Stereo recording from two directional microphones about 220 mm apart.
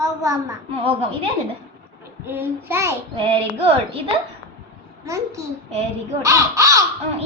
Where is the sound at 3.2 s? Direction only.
25° right (ahead or behind).